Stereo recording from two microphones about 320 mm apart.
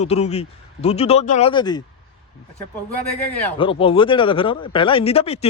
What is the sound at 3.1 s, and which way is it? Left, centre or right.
A man's voice, centre.